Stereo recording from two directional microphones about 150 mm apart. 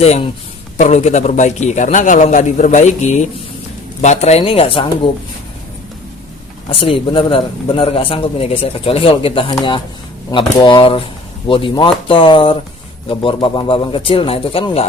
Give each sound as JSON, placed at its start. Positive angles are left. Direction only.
{"t": 0.0, "sound": "a man's voice", "side_deg": 45}
{"t": 6.7, "sound": "speech", "side_deg": 35}